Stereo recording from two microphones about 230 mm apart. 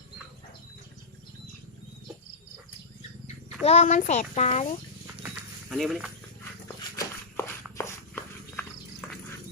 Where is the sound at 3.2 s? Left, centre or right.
Left.